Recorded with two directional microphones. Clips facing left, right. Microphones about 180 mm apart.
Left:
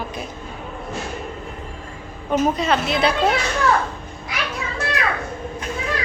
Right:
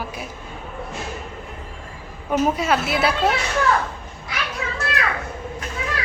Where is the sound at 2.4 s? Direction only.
10° right (ahead or behind).